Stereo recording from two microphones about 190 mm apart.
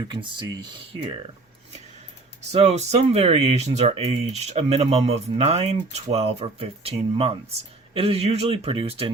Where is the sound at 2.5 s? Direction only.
35° right (ahead or behind).